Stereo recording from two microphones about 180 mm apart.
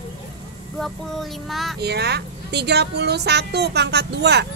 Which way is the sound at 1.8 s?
65° right (ahead or behind).